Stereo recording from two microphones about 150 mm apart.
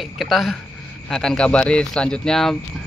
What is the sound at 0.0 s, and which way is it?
Speech, centre (ahead or behind).